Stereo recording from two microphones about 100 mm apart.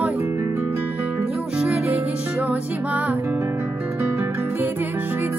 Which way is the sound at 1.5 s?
10° right (ahead or behind).